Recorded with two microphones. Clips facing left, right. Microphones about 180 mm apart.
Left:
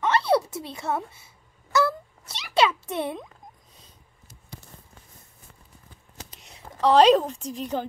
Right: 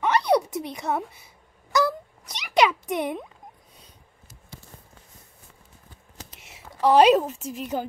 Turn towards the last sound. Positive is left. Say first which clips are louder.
# even
turn(degrees=-10)  # may be behind; listen again after turning